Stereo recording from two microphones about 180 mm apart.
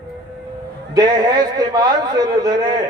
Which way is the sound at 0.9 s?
25° right (ahead or behind).